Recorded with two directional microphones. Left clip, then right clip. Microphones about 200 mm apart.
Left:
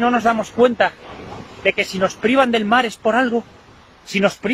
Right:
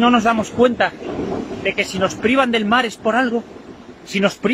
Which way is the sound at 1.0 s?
55° right (ahead or behind).